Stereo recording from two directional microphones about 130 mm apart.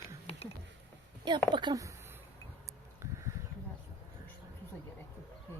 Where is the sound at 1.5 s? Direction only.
35° right (ahead or behind).